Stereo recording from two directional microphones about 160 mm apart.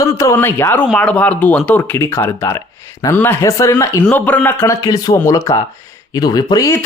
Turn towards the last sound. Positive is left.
turn(degrees=25)  # may be behind; listen again after turning